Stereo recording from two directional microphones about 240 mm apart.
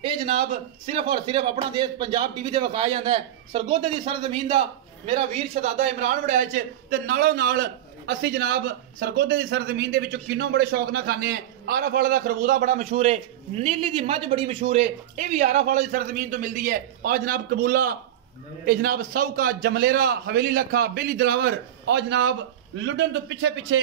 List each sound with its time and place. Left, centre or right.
0.8 s a man's voice: right
5.6 s a man's voice: right